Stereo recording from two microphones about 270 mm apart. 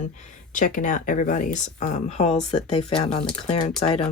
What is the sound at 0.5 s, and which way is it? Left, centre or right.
Speech, left.